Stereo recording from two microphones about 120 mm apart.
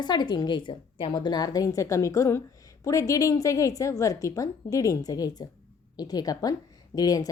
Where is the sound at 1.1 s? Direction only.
35° left (ahead or behind).